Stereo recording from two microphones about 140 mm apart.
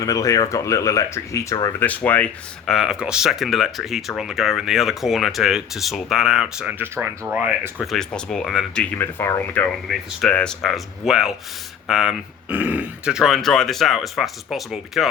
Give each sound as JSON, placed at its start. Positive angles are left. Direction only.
{"t": 0.0, "sound": "speech", "side_deg": 25}
{"t": 2.6, "sound": "speech", "side_deg": 0}
{"t": 7.9, "sound": "speech", "side_deg": 5}
{"t": 9.0, "sound": "speech", "side_deg": 15}
{"t": 9.9, "sound": "speech", "side_deg": 5}